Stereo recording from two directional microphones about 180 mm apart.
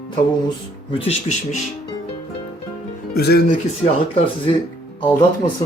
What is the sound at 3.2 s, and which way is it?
Speech, 65° left (ahead or behind).